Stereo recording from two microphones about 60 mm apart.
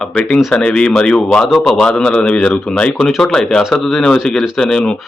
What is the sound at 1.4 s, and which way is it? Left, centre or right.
Speech, centre.